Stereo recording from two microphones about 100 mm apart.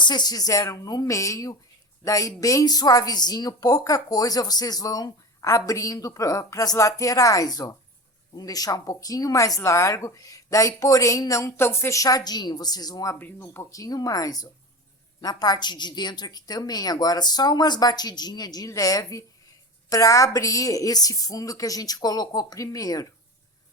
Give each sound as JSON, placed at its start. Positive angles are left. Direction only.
{"t": 0.0, "sound": "a woman's voice", "side_deg": 45}
{"t": 13.1, "sound": "a woman's voice", "side_deg": 20}